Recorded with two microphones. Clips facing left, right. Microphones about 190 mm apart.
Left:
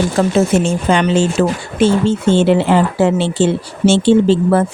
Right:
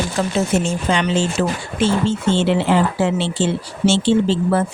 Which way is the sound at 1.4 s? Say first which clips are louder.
Left 5 dB; 55° left (ahead or behind).